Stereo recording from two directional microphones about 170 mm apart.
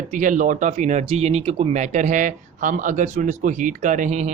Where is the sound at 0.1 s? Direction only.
50° right (ahead or behind).